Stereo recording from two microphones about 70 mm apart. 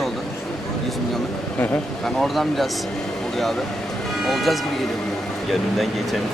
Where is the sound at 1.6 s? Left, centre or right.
Centre.